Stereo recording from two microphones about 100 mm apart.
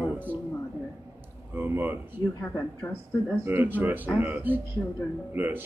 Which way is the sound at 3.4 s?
20° right (ahead or behind).